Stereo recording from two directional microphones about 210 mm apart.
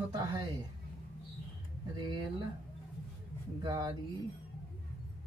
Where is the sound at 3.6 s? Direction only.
20° right (ahead or behind).